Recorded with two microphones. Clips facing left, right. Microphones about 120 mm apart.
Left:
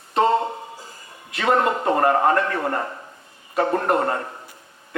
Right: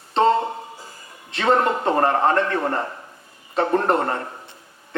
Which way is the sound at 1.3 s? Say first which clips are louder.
Right 1 dB; 30° right (ahead or behind).